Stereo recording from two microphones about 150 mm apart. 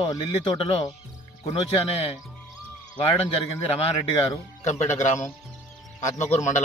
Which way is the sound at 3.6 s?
40° left (ahead or behind).